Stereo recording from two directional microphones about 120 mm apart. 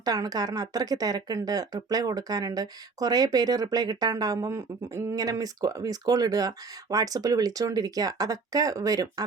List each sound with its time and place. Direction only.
0.0 s speech: 30° right (ahead or behind)